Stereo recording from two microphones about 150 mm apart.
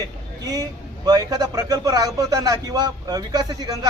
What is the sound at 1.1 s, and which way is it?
Speech, 25° right (ahead or behind).